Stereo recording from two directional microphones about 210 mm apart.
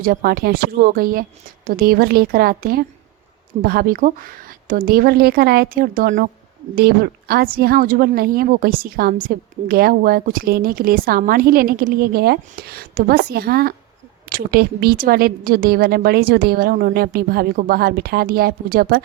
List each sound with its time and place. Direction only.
0.0 s a woman's voice: 45° right (ahead or behind)